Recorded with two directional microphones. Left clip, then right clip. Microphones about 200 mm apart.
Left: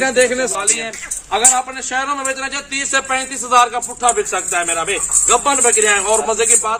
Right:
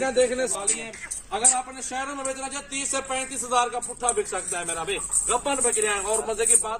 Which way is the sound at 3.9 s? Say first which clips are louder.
Left 11 dB; 30° left (ahead or behind).